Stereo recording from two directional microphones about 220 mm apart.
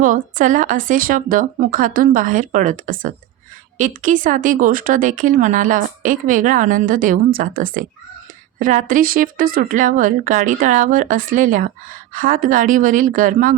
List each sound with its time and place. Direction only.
0.0 s speech: 35° right (ahead or behind)